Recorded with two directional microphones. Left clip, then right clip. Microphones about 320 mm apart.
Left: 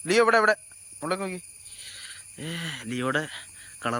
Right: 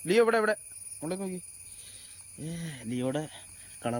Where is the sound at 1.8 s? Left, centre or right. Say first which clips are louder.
Left 14 dB; centre.